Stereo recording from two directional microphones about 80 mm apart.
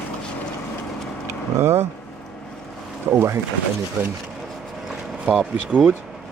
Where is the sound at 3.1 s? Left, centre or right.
Right.